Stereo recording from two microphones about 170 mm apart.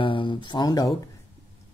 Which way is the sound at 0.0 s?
30° left (ahead or behind).